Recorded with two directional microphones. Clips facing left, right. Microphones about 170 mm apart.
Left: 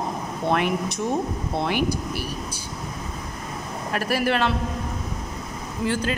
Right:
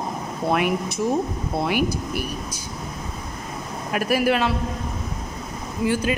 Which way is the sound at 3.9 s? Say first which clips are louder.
Right 3 dB; 10° right (ahead or behind).